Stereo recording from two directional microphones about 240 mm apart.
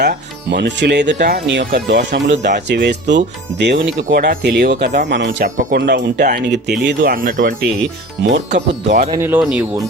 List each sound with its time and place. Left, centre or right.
0.0 s speech: right
5.0 s speech: right
5.4 s speech: right
9.1 s speech: centre